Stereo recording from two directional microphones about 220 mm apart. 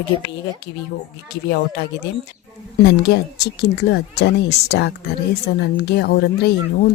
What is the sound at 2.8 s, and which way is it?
Speech, 50° left (ahead or behind).